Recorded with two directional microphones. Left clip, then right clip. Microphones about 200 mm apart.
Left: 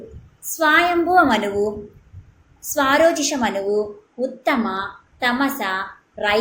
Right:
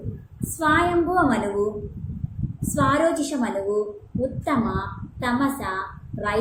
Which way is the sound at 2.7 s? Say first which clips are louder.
Left 5 dB; 5° right (ahead or behind).